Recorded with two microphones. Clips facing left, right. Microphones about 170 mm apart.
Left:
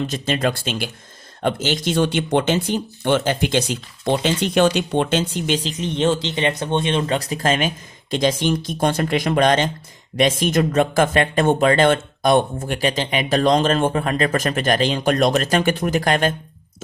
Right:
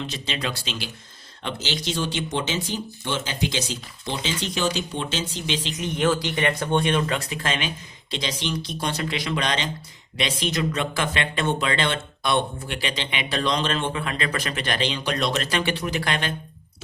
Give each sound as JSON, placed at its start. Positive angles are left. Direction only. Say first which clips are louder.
{"t": 0.0, "sound": "speech", "louder": "left 9 dB", "side_deg": 45}
{"t": 5.7, "sound": "speech", "louder": "even", "side_deg": 30}